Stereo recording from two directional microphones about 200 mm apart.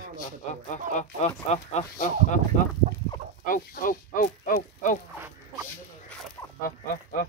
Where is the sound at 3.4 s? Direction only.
45° left (ahead or behind).